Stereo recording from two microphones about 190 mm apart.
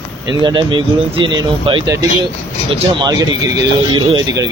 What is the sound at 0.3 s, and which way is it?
Speech, 25° right (ahead or behind).